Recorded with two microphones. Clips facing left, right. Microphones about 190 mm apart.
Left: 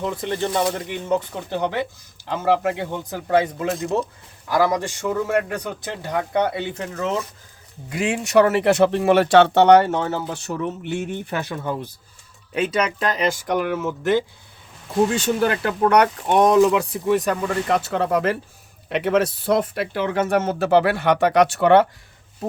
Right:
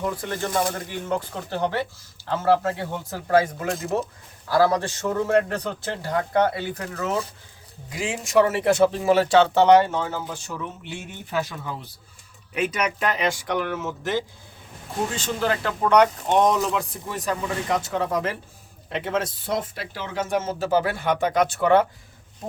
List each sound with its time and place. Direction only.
0.0 s speech: 20° left (ahead or behind)
3.7 s speech: centre (ahead or behind)
4.4 s speech: 15° left (ahead or behind)
7.9 s speech: 65° left (ahead or behind)
12.7 s speech: 35° left (ahead or behind)
14.0 s speech: 55° left (ahead or behind)